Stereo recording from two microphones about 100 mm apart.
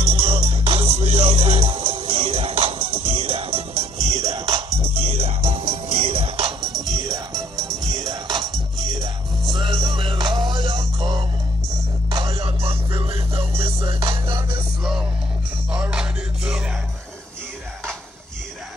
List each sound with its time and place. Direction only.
0.0 s music: 65° right (ahead or behind)
4.1 s music: 35° right (ahead or behind)
4.5 s music: 65° right (ahead or behind); by 6.5 s 85° right
6.9 s music: 35° right (ahead or behind)
7.5 s music: 5° left (ahead or behind)
7.9 s music: 40° right (ahead or behind)
12.3 s music: 70° right (ahead or behind)
14.8 s music: 5° right (ahead or behind)